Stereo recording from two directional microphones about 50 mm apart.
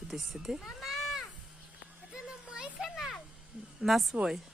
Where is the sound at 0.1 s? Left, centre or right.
Centre.